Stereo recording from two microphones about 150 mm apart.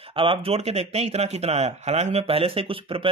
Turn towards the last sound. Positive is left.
turn(degrees=-35)  # may be behind; listen again after turning